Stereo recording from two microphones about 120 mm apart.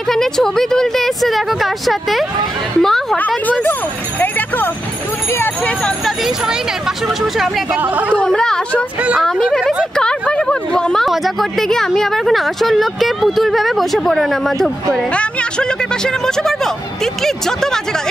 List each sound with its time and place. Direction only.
0.1 s a woman's voice: 5° left (ahead or behind)
6.0 s speech: centre (ahead or behind)
7.8 s speech: 15° right (ahead or behind)
8.2 s speech: 5° left (ahead or behind)